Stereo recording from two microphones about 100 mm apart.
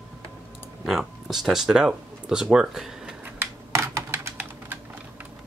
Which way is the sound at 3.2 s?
25° right (ahead or behind).